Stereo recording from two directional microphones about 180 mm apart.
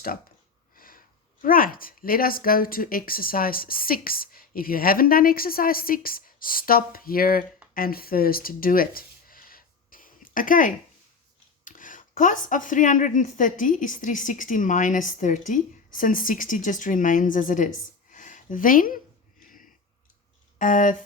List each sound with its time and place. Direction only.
0.8 s speech: 50° left (ahead or behind)
18.1 s a sound: 45° left (ahead or behind)
19.4 s sniff: 50° left (ahead or behind)
20.6 s speech: 45° left (ahead or behind)